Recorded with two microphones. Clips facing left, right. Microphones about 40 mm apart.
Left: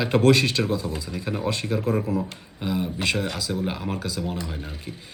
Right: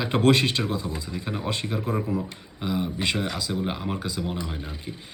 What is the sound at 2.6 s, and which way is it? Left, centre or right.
Speech, centre.